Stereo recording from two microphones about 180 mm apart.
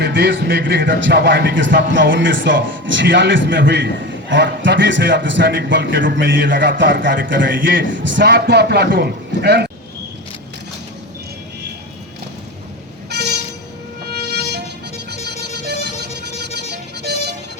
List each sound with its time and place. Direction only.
0.0 s a man's voice: 75° right (ahead or behind)
14.1 s music: 65° right (ahead or behind)
15.1 s vehicle: 65° right (ahead or behind)
16.7 s music: 65° right (ahead or behind)